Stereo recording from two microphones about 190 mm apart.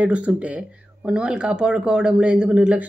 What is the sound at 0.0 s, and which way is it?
Speech, 5° right (ahead or behind).